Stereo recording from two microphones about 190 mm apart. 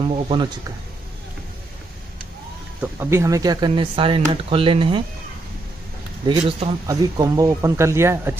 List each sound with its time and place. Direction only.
0.0 s speech: 25° right (ahead or behind)
2.8 s speech: 15° right (ahead or behind)
6.2 s speech: 20° right (ahead or behind)